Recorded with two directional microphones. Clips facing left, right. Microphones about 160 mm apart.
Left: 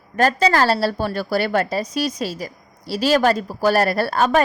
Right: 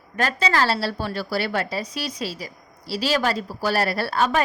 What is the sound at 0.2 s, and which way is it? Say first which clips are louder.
A woman's voice: left 5 dB; 40° left (ahead or behind).